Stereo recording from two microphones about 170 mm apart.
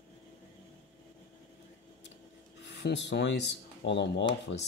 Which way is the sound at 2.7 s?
90° left.